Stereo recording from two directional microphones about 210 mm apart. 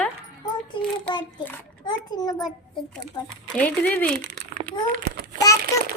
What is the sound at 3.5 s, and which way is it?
Speech, 5° left (ahead or behind).